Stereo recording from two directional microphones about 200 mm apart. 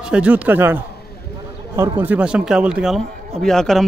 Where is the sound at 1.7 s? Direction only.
20° right (ahead or behind).